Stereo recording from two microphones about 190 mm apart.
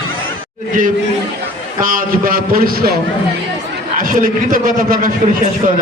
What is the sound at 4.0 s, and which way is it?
A man's voice, 45° right (ahead or behind).